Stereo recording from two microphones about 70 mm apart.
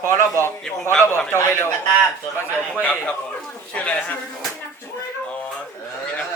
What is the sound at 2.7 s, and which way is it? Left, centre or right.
A man's voice, centre.